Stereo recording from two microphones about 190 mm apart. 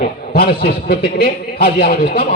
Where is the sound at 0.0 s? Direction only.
55° left (ahead or behind).